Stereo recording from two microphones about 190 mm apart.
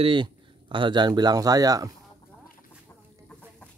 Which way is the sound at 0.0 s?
25° right (ahead or behind).